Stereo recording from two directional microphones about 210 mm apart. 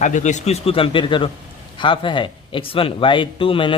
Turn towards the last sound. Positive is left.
turn(degrees=25)  # may be behind; listen again after turning